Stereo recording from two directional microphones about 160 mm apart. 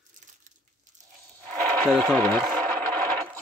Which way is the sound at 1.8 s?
Centre (ahead or behind).